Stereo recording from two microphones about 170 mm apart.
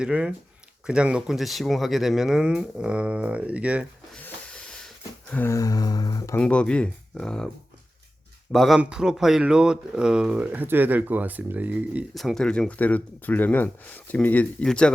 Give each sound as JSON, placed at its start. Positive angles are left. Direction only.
{"t": 0.0, "sound": "speech", "side_deg": -5}
{"t": 4.1, "sound": "a sound", "side_deg": 5}
{"t": 6.4, "sound": "speech", "side_deg": 5}
{"t": 8.5, "sound": "speech", "side_deg": 0}
{"t": 12.1, "sound": "speech", "side_deg": 0}